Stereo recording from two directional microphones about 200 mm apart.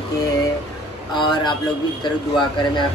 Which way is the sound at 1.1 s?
20° left (ahead or behind).